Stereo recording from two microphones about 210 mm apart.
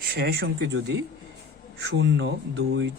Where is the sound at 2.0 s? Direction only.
55° right (ahead or behind).